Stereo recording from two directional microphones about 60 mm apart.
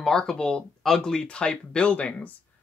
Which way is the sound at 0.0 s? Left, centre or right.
Centre.